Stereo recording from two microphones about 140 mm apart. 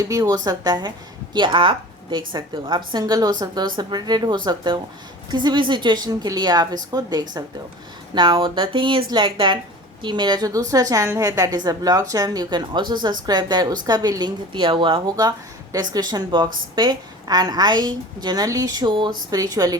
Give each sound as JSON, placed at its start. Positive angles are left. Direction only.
{"t": 0.0, "sound": "a woman's voice", "side_deg": -25}